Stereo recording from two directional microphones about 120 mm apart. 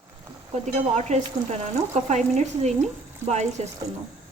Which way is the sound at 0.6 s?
80° right.